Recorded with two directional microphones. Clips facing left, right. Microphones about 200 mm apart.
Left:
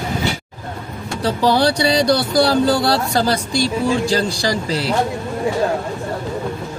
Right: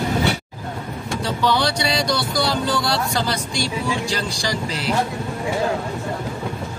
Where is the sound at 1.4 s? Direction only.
35° left (ahead or behind).